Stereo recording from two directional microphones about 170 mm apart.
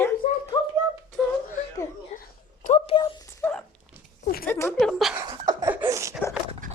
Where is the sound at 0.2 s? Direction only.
50° left (ahead or behind).